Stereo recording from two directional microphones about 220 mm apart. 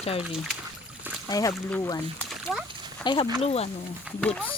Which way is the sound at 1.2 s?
15° left (ahead or behind).